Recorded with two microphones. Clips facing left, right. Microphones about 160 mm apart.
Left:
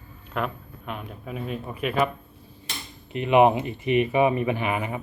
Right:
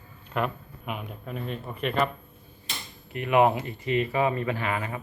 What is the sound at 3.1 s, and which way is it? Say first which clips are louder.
Speech: left 4 dB; 20° left (ahead or behind).